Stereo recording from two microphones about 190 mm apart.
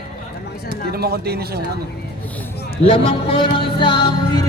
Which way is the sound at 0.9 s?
55° right (ahead or behind).